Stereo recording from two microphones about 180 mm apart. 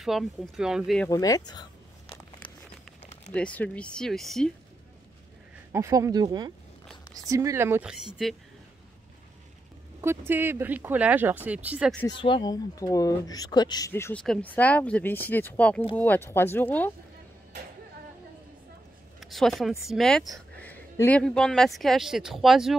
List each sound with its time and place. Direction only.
0.0 s speech: centre (ahead or behind)
1.0 s a sound: 20° left (ahead or behind)
3.3 s speech: 5° left (ahead or behind)
5.7 s speech: 15° right (ahead or behind); by 8.4 s centre (ahead or behind)
10.0 s speech: 10° right (ahead or behind)
12.2 s speech: 25° left (ahead or behind)
19.1 s a sound: centre (ahead or behind)
19.9 s speech: 5° left (ahead or behind)